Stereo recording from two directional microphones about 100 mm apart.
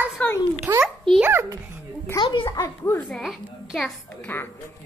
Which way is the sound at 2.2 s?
55° left (ahead or behind).